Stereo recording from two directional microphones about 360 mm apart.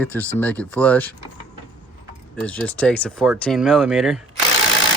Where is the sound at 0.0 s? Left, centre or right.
Centre.